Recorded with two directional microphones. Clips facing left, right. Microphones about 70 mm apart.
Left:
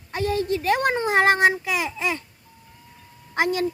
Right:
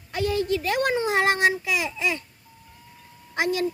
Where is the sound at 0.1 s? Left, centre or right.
Left.